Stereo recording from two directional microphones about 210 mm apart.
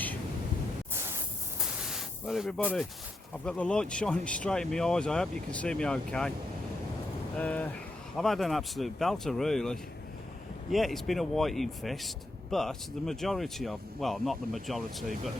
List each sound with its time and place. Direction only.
1.5 s a sound: 5° right (ahead or behind)
3.4 s speech: 5° left (ahead or behind)
7.3 s speech: 5° left (ahead or behind)